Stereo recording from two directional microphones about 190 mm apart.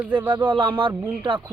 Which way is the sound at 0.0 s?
10° right (ahead or behind).